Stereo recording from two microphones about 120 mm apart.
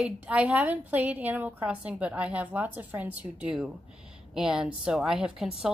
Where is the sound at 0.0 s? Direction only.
10° right (ahead or behind).